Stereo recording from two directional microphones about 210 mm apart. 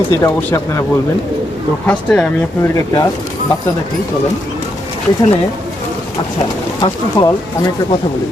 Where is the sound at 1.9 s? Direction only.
5° left (ahead or behind).